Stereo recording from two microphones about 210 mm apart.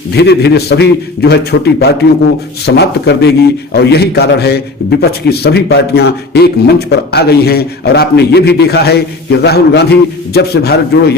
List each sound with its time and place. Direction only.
0.2 s a man's voice: 50° left (ahead or behind)